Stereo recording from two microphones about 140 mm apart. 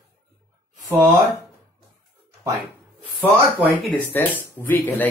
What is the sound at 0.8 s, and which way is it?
Speech, 20° right (ahead or behind).